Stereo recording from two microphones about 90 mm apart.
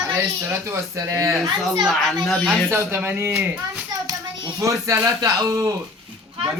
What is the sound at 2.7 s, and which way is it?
Speech, 30° right (ahead or behind).